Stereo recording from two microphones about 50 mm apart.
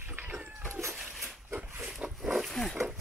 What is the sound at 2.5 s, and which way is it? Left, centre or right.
Wild animals, centre.